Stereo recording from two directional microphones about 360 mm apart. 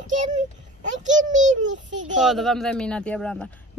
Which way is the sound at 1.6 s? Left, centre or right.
Right.